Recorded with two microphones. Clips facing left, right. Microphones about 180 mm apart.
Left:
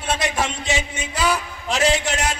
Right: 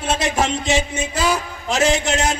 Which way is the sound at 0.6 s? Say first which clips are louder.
Right 5 dB; 45° right (ahead or behind).